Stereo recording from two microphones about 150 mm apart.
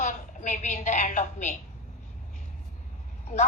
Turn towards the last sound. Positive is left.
turn(degrees=50)  # may be behind; listen again after turning